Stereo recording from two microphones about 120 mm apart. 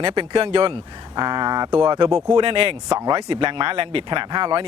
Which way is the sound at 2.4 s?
50° right (ahead or behind).